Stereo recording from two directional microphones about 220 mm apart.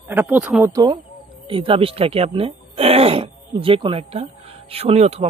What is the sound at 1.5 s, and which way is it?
Speech, 25° right (ahead or behind).